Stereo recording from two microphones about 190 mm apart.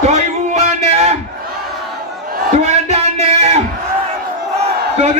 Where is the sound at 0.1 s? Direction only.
35° right (ahead or behind).